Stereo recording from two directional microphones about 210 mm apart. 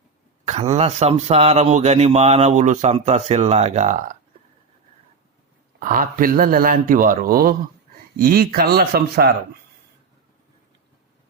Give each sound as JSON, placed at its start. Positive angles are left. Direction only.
{"t": 0.4, "sound": "a man's voice", "side_deg": -30}
{"t": 5.8, "sound": "a man's voice", "side_deg": -40}